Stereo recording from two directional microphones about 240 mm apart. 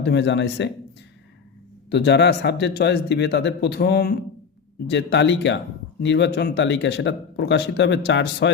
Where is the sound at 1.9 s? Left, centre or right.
Left.